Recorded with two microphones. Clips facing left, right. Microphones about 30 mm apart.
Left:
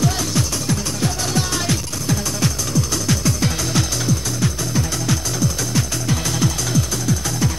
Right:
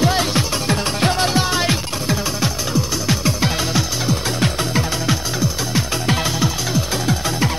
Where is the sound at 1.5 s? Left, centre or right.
Right.